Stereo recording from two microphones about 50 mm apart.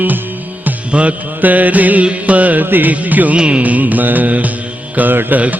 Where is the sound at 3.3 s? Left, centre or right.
Right.